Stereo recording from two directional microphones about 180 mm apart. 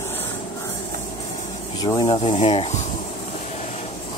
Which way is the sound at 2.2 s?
30° left (ahead or behind).